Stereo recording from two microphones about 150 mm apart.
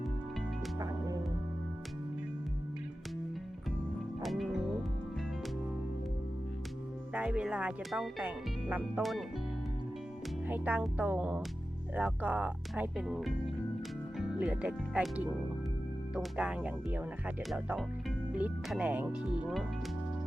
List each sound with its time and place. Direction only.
0.8 s music: 25° right (ahead or behind)
4.2 s music: centre (ahead or behind)
7.1 s speech: 10° right (ahead or behind)
10.5 s speech: 10° right (ahead or behind)